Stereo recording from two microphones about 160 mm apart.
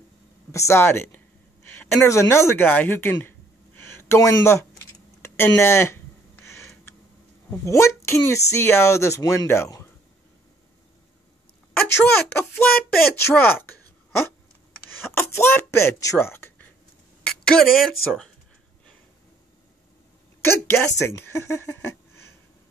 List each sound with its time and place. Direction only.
0.5 s speech: 20° left (ahead or behind)
2.0 s a sound: 15° left (ahead or behind)
7.6 s a child's voice: 15° left (ahead or behind)
11.7 s speech: 15° left (ahead or behind)
15.0 s speech: 15° left (ahead or behind)
17.3 s speech: centre (ahead or behind)
20.4 s speech: 15° left (ahead or behind)